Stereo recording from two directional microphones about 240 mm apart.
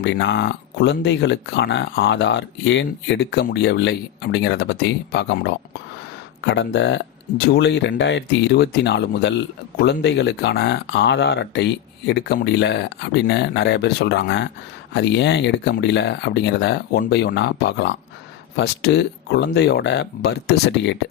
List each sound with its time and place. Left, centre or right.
0.0 s speech: left